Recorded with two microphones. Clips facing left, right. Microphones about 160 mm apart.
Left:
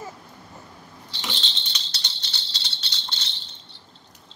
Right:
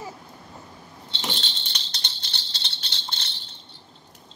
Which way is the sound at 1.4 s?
55° right (ahead or behind).